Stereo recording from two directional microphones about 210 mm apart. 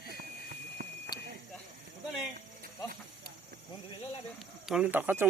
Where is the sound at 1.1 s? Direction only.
50° left (ahead or behind).